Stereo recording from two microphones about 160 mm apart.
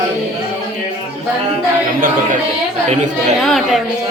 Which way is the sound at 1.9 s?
60° right (ahead or behind).